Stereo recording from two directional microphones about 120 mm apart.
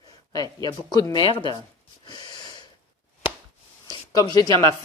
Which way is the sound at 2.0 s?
35° left (ahead or behind).